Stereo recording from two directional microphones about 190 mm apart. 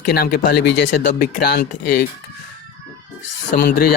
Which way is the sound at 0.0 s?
55° left (ahead or behind).